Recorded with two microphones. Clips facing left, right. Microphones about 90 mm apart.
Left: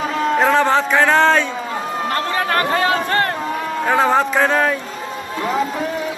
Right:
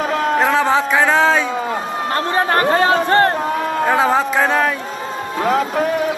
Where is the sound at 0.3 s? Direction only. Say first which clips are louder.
Left 1 dB; 5° right (ahead or behind).